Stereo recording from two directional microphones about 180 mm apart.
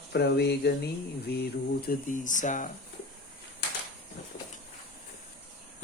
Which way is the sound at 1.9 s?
45° left (ahead or behind).